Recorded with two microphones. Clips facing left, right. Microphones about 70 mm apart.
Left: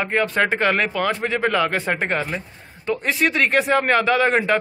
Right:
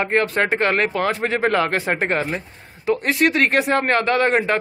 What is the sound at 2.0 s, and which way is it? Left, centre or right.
Speech, centre.